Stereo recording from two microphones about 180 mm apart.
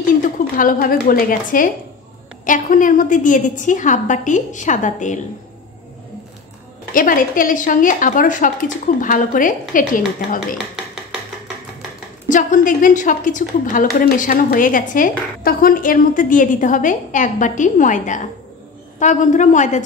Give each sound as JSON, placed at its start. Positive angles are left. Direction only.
{"t": 0.2, "sound": "a woman's voice", "side_deg": 50}
{"t": 6.9, "sound": "a woman's voice", "side_deg": 50}
{"t": 12.3, "sound": "a woman's voice", "side_deg": 45}